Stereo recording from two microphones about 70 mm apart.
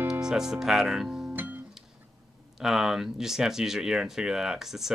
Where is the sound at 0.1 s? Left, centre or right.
Centre.